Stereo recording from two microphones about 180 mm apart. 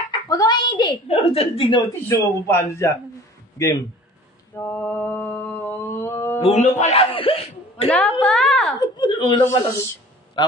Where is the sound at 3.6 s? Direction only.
20° left (ahead or behind).